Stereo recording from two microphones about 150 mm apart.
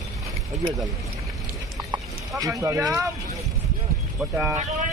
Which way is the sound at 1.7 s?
25° right (ahead or behind).